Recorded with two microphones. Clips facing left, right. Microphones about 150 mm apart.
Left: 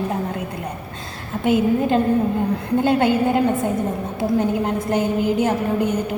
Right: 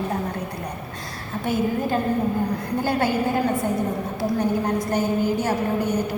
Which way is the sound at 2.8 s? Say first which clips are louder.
Left 5 dB; 25° left (ahead or behind).